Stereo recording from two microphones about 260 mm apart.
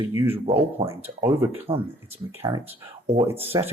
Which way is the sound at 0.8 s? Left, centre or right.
Centre.